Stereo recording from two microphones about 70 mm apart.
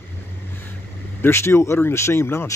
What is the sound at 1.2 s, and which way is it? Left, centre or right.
Speech, left.